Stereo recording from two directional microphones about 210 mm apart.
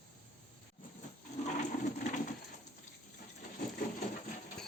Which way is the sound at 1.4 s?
35° left (ahead or behind).